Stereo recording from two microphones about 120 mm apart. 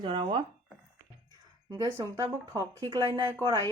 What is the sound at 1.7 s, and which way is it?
Speech, 25° right (ahead or behind).